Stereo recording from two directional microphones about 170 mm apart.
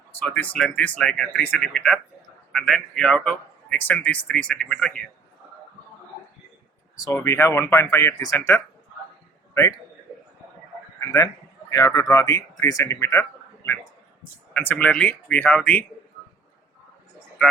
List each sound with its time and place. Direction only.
0.1 s a man's voice: 10° left (ahead or behind)
6.9 s speech: 20° left (ahead or behind)
11.7 s speech: 20° left (ahead or behind)